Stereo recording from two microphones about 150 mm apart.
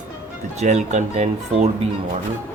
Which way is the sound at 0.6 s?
50° right (ahead or behind).